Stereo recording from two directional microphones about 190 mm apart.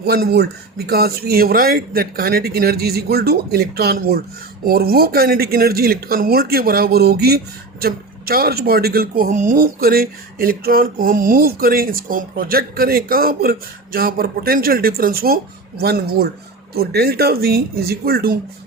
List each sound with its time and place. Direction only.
0.0 s speech: 55° right (ahead or behind)